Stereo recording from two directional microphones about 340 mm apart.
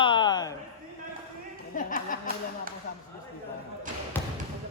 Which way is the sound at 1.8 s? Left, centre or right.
Left.